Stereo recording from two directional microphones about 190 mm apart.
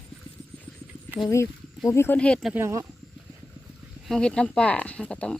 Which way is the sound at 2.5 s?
15° right (ahead or behind).